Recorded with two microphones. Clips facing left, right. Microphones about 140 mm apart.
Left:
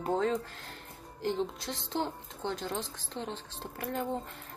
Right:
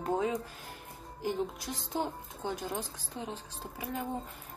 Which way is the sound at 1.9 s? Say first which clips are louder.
Even; 10° right (ahead or behind).